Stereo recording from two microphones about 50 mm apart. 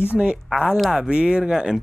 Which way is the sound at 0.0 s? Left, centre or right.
Right.